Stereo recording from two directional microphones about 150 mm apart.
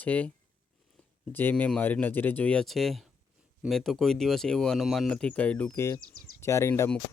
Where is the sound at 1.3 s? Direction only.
15° left (ahead or behind).